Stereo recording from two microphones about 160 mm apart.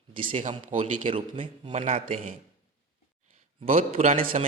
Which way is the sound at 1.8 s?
50° right (ahead or behind).